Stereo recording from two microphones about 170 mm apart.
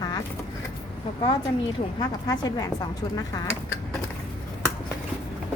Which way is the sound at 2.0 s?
20° left (ahead or behind).